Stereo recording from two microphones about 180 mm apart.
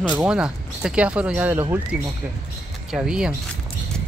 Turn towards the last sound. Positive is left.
turn(degrees=-5)  # may be behind; listen again after turning